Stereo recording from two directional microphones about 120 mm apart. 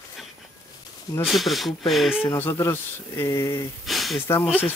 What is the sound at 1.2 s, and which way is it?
Speech, centre (ahead or behind).